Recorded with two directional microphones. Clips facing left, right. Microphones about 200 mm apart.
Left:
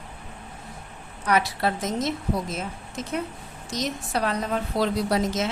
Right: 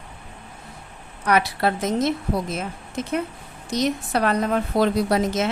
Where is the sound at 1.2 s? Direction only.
60° right (ahead or behind).